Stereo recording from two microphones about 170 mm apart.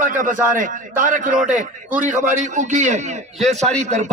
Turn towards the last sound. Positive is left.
turn(degrees=-40)  # may be behind; listen again after turning